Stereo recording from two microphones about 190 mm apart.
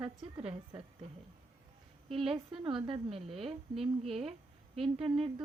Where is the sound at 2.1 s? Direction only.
30° right (ahead or behind).